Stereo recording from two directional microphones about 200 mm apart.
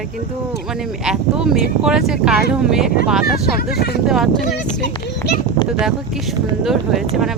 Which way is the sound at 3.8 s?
50° left (ahead or behind).